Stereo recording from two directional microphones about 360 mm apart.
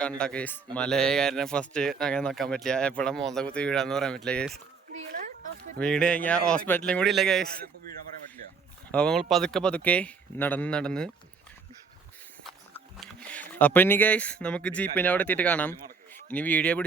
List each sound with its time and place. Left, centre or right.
0.2 s speech: centre
4.9 s a sound: centre
5.8 s speech: centre
8.9 s speech: centre
12.4 s a sound: centre
14.9 s speech: centre